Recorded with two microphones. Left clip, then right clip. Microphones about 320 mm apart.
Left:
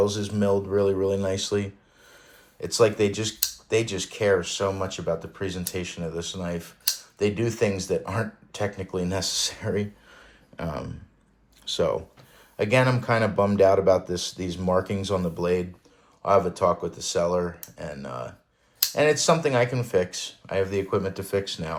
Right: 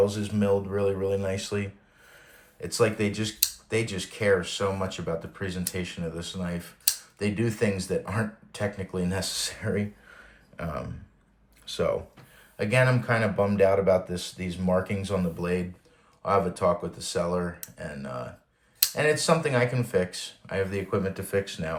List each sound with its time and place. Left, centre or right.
0.0 s speech: centre